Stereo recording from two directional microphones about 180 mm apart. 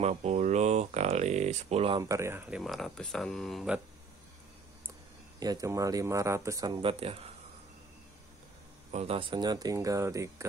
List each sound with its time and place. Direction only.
0.0 s speech: 40° right (ahead or behind)
2.0 s speech: 15° right (ahead or behind)
5.4 s speech: 20° right (ahead or behind)
8.9 s speech: 35° right (ahead or behind); by 10.3 s 15° right (ahead or behind)